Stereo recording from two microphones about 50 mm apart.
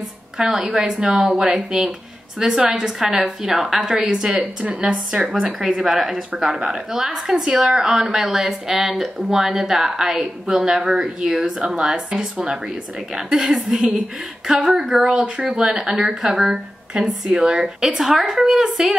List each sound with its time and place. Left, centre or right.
0.4 s a woman's voice: centre
16.9 s speech: centre